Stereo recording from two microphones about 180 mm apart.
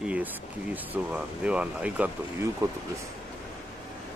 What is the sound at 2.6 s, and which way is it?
Speech, 15° right (ahead or behind).